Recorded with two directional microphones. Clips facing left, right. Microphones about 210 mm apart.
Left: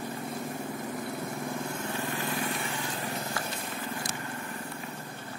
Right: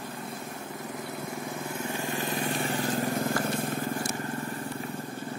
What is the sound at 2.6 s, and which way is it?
Vehicle, 40° right (ahead or behind).